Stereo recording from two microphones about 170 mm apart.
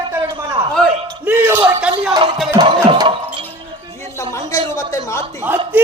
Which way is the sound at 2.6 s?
25° right (ahead or behind).